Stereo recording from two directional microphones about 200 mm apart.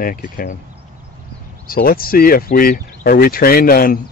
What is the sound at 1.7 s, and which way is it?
Speech, 50° left (ahead or behind).